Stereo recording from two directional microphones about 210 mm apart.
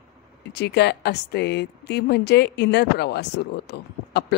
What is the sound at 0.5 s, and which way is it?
Speech, 55° left (ahead or behind).